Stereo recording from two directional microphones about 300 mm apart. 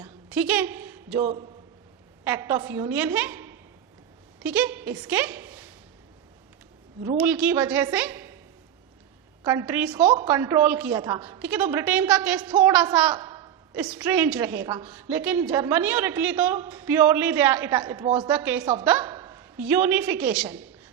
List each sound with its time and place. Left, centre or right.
0.0 s a sound: centre
1.2 s a man's voice: centre
7.0 s a woman's voice: centre
9.4 s a woman's voice: centre
10.0 s a woman's voice: centre